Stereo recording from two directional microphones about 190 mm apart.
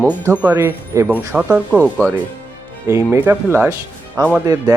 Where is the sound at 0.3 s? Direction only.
15° right (ahead or behind).